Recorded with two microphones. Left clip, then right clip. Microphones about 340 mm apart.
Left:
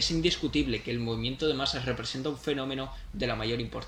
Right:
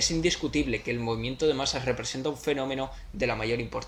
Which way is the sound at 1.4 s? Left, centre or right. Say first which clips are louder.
Right 3 dB; centre.